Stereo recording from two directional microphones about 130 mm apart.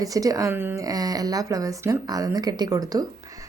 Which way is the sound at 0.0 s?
25° right (ahead or behind).